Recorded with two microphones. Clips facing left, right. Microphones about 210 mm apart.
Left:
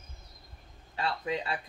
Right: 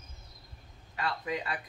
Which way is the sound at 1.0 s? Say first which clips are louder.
Left 2 dB; 25° left (ahead or behind).